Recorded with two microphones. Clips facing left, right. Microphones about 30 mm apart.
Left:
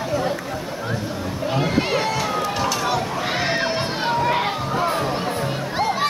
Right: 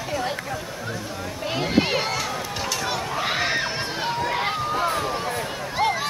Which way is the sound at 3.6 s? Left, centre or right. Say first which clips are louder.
Left 4 dB; left.